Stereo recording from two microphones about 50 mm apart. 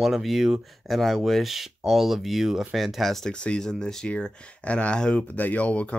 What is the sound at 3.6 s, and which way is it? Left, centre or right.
Speech, centre.